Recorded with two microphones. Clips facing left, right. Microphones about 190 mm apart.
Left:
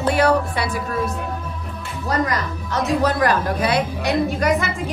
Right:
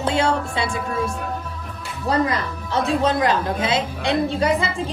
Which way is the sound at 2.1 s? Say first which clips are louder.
Right 1 dB; 30° right (ahead or behind).